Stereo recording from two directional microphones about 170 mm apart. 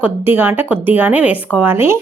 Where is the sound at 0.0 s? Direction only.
10° right (ahead or behind).